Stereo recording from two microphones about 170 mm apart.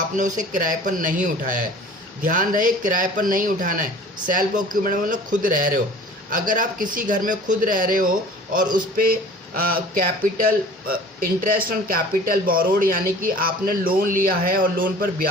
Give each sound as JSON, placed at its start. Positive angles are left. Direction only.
{"t": 0.2, "sound": "a man's voice", "side_deg": -50}